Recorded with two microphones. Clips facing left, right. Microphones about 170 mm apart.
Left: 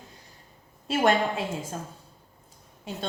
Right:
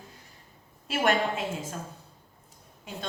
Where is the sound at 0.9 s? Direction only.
30° left (ahead or behind).